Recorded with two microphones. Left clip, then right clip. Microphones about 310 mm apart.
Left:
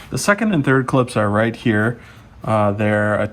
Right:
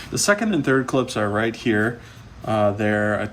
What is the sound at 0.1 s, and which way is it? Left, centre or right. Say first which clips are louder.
Speech: left 2 dB; centre.